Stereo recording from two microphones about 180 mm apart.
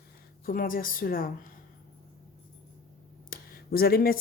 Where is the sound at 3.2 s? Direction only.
55° left (ahead or behind).